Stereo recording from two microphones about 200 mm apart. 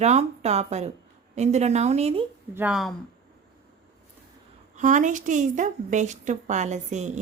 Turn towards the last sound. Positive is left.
turn(degrees=-35)  # may be behind; listen again after turning